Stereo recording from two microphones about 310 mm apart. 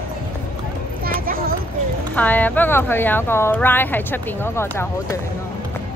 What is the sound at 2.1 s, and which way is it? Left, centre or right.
Speech, centre.